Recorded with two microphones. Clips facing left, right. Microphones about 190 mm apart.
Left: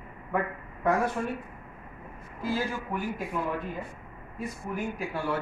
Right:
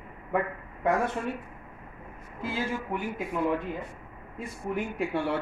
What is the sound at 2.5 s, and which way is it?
Speech, 20° right (ahead or behind).